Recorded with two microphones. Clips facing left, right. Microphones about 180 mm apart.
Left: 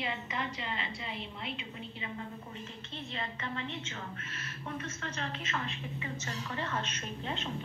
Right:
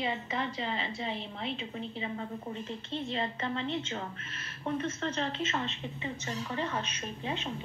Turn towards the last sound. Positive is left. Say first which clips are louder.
# right 2 dB
turn(degrees=-15)  # may be behind; listen again after turning